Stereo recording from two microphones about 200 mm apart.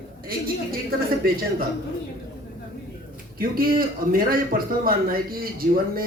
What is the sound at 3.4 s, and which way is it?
A man's voice, 45° right (ahead or behind).